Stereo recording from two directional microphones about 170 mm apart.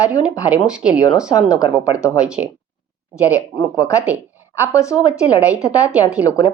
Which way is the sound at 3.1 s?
20° left (ahead or behind).